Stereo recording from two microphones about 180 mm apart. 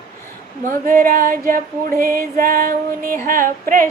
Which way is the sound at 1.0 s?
50° right (ahead or behind).